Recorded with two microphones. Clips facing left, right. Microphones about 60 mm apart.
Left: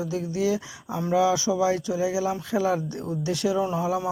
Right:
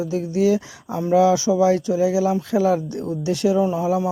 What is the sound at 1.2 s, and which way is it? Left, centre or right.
Speech, right.